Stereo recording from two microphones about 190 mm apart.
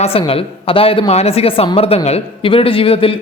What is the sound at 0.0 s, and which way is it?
Speech, 30° left (ahead or behind).